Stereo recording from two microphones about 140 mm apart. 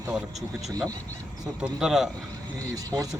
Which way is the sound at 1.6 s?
5° right (ahead or behind).